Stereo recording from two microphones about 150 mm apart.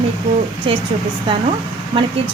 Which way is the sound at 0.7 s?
35° right (ahead or behind).